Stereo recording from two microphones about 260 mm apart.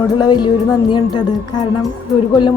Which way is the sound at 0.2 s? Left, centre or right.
Centre.